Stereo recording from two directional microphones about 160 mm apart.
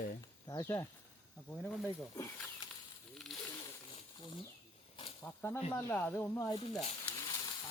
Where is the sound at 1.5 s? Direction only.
5° left (ahead or behind).